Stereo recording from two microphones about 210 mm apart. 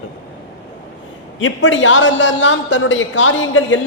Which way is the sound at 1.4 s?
65° left (ahead or behind).